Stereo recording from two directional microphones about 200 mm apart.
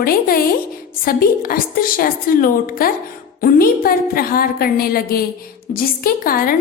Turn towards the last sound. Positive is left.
turn(degrees=45)  # may be behind; listen again after turning